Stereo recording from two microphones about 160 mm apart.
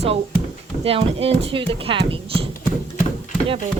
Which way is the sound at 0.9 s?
35° right (ahead or behind).